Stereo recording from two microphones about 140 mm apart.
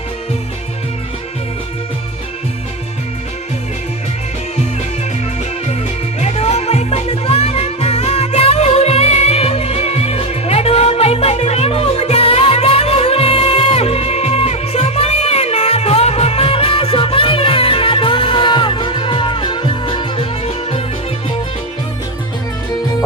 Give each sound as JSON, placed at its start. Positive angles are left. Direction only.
{"t": 6.1, "sound": "music", "side_deg": 50}